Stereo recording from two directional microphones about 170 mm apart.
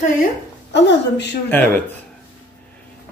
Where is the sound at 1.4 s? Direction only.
10° left (ahead or behind).